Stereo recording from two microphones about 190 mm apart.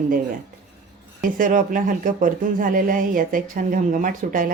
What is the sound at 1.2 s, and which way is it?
Speech, 45° right (ahead or behind).